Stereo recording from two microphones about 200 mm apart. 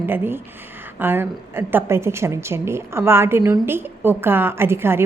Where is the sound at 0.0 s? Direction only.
10° right (ahead or behind).